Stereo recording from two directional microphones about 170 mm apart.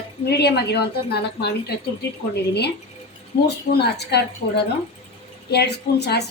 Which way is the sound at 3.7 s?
75° left (ahead or behind).